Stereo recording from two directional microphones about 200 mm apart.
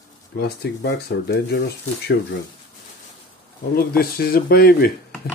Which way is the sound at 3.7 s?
50° left (ahead or behind).